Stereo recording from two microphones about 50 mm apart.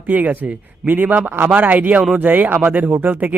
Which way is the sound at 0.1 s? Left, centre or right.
Right.